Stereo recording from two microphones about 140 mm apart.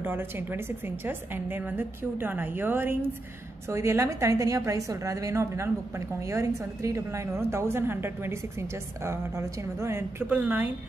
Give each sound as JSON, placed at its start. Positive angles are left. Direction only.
{"t": 0.0, "sound": "a woman's voice", "side_deg": -15}